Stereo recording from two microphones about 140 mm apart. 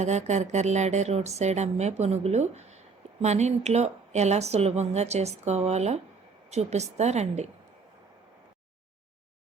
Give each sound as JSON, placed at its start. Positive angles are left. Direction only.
{"t": 0.0, "sound": "a woman's voice", "side_deg": -55}